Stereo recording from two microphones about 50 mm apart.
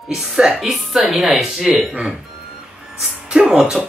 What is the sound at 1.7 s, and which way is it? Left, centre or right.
Speech, centre.